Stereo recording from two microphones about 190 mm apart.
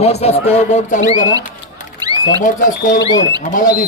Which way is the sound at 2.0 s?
20° right (ahead or behind).